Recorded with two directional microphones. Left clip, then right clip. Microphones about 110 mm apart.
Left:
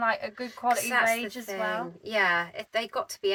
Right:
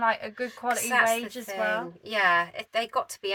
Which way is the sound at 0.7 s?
15° left (ahead or behind).